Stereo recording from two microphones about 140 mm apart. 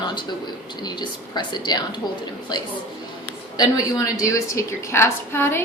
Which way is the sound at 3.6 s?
25° left (ahead or behind).